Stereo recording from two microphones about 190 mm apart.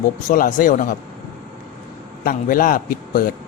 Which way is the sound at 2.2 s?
50° left (ahead or behind).